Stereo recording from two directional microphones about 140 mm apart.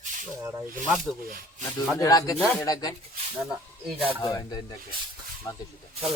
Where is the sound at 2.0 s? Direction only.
25° left (ahead or behind).